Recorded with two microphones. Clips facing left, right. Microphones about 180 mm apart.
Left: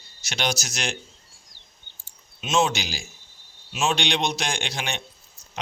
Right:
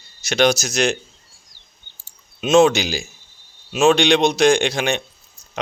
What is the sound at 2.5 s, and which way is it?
Speech, 70° right (ahead or behind).